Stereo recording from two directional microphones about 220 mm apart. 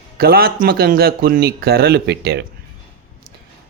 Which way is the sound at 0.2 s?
45° right (ahead or behind).